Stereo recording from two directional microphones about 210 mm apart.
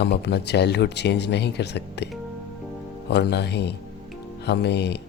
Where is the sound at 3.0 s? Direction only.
50° left (ahead or behind).